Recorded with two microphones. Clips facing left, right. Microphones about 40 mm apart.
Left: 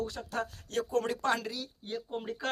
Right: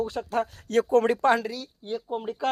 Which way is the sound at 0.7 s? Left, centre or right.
Right.